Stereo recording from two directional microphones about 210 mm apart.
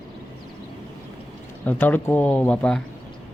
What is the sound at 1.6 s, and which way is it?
Speech, 10° left (ahead or behind).